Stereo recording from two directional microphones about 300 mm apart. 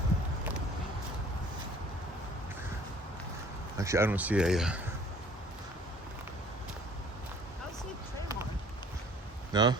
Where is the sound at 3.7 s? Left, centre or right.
Centre.